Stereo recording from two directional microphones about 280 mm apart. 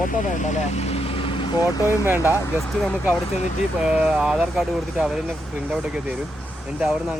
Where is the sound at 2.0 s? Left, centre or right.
Centre.